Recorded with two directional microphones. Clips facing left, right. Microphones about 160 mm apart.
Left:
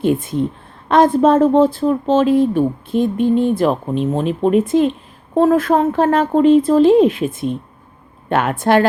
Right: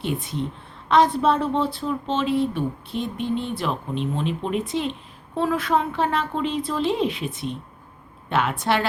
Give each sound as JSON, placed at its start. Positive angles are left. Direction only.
{"t": 0.0, "sound": "speech", "side_deg": 50}